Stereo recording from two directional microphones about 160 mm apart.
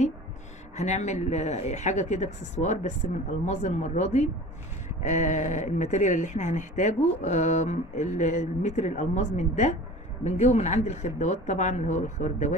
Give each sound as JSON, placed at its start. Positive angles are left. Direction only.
{"t": 0.7, "sound": "speech", "side_deg": 45}